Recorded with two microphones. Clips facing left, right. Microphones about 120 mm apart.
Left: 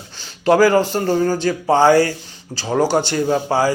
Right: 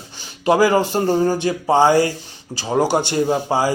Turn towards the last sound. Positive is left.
turn(degrees=-20)  # may be behind; listen again after turning